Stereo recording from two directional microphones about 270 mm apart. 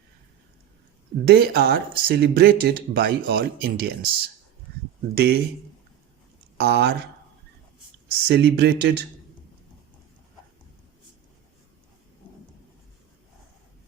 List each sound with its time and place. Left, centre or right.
1.2 s speech: right
5.1 s speech: right
6.6 s speech: right
8.3 s speech: right